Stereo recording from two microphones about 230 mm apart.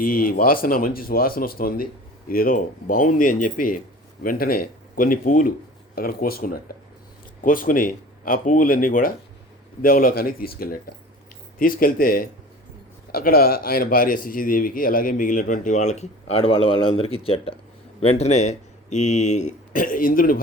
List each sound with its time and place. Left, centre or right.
0.0 s a man's voice: left